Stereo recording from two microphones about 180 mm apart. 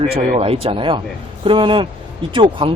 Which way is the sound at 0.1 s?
35° right (ahead or behind).